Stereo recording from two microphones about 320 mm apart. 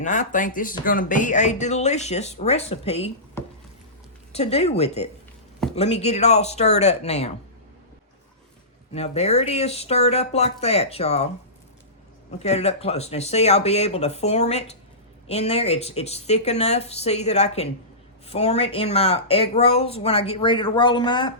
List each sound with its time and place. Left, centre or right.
0.0 s speech: left
4.3 s speech: centre
8.9 s speech: centre
12.4 s speech: centre